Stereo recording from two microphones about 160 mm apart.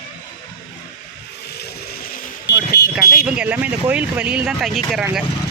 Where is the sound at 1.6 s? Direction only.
70° left (ahead or behind).